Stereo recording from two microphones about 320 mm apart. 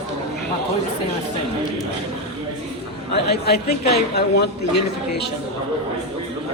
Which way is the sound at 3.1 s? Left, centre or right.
Left.